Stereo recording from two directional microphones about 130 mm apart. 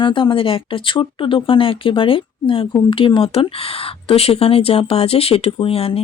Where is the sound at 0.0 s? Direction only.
35° left (ahead or behind).